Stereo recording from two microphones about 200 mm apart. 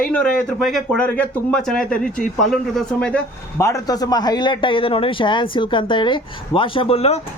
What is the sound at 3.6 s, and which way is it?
A man's voice, 15° left (ahead or behind).